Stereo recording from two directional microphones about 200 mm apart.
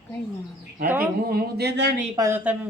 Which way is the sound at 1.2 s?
50° right (ahead or behind).